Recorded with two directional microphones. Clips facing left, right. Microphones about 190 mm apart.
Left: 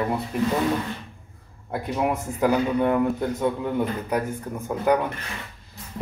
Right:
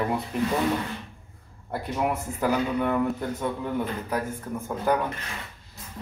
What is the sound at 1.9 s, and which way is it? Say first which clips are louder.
A man's voice: left 2 dB; 15° left (ahead or behind).